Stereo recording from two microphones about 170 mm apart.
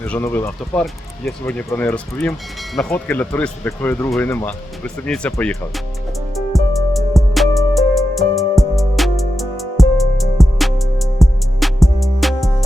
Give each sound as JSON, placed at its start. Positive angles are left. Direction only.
{"t": 0.0, "sound": "speech", "side_deg": 10}
{"t": 6.3, "sound": "music", "side_deg": 0}